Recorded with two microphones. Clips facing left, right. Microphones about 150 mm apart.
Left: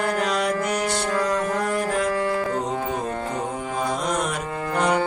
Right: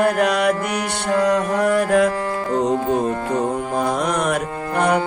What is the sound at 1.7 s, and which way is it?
Music, 70° right (ahead or behind).